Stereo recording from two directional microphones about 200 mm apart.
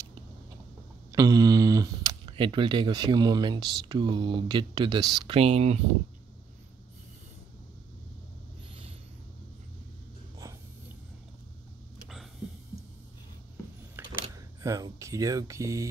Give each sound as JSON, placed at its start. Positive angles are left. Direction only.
{"t": 1.1, "sound": "speech", "side_deg": -15}
{"t": 14.6, "sound": "speech", "side_deg": -15}